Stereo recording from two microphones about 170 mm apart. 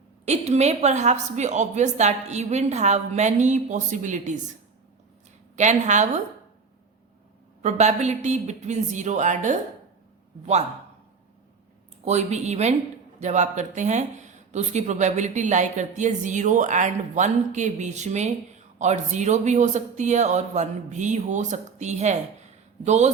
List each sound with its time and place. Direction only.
0.3 s speech: 40° right (ahead or behind)
5.5 s speech: 45° right (ahead or behind)
7.6 s speech: 40° right (ahead or behind)
12.0 s speech: 40° right (ahead or behind)